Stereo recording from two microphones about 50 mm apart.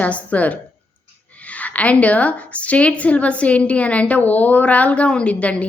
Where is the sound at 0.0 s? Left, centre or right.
Left.